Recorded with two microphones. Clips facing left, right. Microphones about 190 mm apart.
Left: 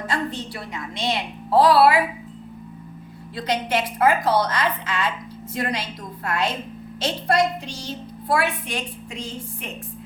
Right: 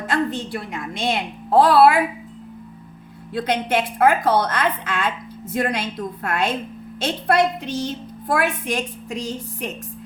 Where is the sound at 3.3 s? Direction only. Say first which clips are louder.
Right 3 dB; 55° right (ahead or behind).